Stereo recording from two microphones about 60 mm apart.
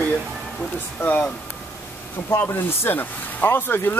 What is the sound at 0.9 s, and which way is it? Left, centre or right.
Speech, left.